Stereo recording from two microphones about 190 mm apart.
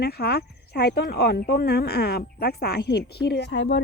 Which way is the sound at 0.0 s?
55° left (ahead or behind).